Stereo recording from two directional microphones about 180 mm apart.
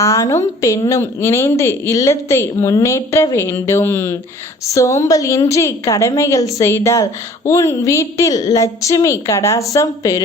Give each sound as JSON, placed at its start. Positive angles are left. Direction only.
{"t": 0.0, "sound": "a woman's voice", "side_deg": 15}